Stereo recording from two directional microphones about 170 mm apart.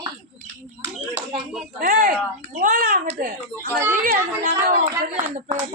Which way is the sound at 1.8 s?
55° right (ahead or behind).